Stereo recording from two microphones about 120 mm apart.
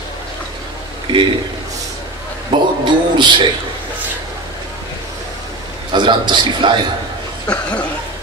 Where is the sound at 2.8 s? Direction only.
40° right (ahead or behind).